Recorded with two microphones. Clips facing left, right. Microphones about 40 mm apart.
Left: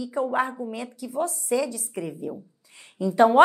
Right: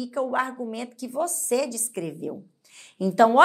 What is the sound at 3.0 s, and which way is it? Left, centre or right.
Speech, centre.